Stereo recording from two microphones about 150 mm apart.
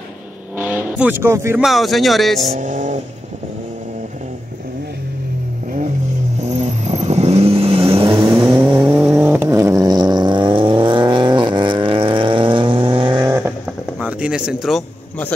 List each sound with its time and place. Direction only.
0.6 s speech: 10° right (ahead or behind)
1.6 s speech: centre (ahead or behind)
2.5 s vehicle: 55° right (ahead or behind)
6.4 s vehicle: 50° right (ahead or behind); by 8.4 s 30° right (ahead or behind)
8.4 s vehicle: 20° right (ahead or behind)
8.9 s vehicle: 5° right (ahead or behind); by 13.5 s 20° right (ahead or behind)
13.9 s a sound: 5° right (ahead or behind)